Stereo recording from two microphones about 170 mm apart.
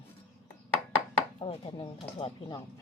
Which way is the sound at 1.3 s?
35° left (ahead or behind).